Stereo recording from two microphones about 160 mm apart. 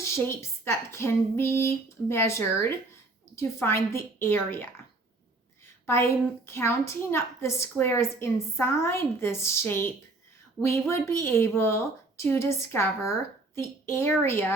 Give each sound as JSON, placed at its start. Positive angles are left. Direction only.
{"t": 0.0, "sound": "a woman's voice", "side_deg": 15}
{"t": 5.8, "sound": "a woman's voice", "side_deg": 15}